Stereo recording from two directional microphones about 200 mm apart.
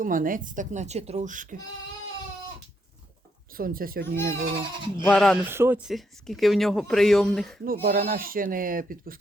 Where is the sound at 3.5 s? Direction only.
45° right (ahead or behind).